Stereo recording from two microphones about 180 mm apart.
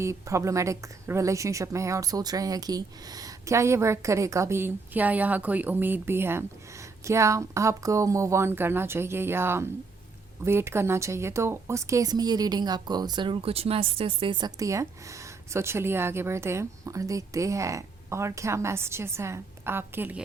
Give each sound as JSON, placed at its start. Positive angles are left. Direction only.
{"t": 0.0, "sound": "speech", "side_deg": -15}